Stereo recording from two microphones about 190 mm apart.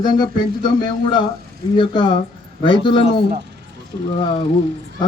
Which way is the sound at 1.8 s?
25° left (ahead or behind).